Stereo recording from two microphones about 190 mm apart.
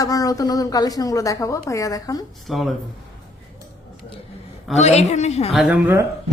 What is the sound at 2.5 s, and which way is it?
Speech, centre (ahead or behind).